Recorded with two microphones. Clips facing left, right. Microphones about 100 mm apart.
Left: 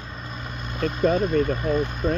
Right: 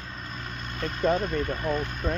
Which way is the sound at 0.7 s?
5° left (ahead or behind).